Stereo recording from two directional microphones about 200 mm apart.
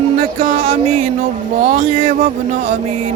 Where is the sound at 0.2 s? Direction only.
45° right (ahead or behind).